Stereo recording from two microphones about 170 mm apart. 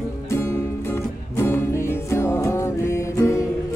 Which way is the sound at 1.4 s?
15° left (ahead or behind).